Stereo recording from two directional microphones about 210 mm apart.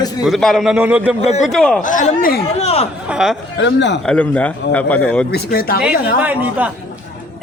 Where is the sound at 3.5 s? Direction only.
55° left (ahead or behind).